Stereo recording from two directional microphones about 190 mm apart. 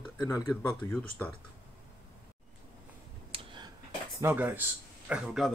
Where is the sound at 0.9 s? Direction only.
10° left (ahead or behind).